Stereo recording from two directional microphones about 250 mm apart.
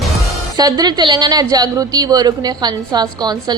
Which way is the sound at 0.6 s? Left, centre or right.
Centre.